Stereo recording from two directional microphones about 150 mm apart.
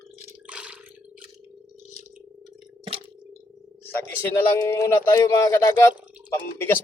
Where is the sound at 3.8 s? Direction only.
15° left (ahead or behind).